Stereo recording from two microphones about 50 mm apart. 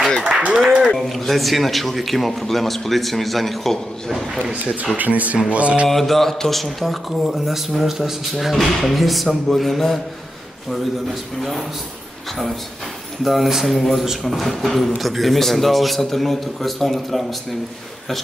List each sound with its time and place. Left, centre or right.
0.2 s a sound: right
0.8 s a man's voice: centre
4.9 s speech: right
5.5 s mantra: right
5.9 s a man's voice: centre
13.2 s a man's voice: centre